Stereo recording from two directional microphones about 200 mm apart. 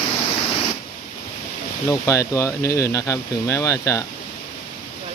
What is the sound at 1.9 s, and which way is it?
Speech, 15° left (ahead or behind).